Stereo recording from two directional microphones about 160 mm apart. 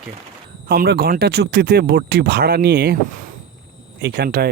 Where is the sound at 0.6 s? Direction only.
85° right.